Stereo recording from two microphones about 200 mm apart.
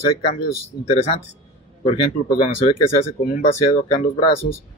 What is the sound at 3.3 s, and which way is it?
Speech, 35° left (ahead or behind).